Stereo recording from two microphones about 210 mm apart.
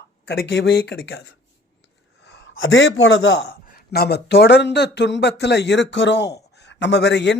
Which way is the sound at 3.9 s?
50° left (ahead or behind).